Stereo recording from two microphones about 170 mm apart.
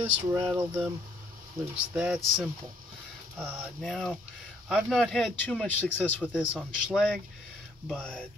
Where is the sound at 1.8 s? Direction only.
5° right (ahead or behind).